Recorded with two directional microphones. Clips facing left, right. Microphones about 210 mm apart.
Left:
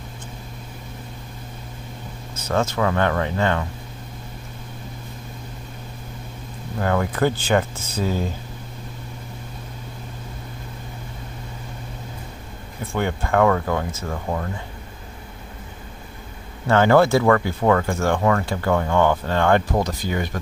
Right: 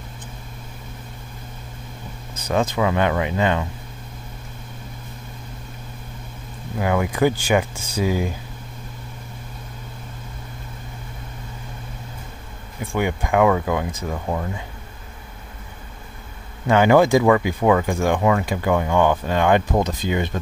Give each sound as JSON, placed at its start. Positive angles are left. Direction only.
{"t": 2.3, "sound": "speech", "side_deg": -15}
{"t": 6.8, "sound": "speech", "side_deg": -10}
{"t": 12.9, "sound": "speech", "side_deg": -10}
{"t": 16.6, "sound": "speech", "side_deg": -15}